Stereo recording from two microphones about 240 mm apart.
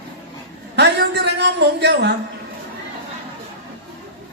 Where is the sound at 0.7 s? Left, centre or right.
Right.